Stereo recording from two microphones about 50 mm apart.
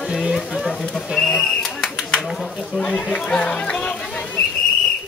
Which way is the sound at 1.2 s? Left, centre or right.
Centre.